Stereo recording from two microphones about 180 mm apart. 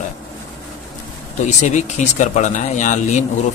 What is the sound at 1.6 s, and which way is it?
Speech, 40° left (ahead or behind).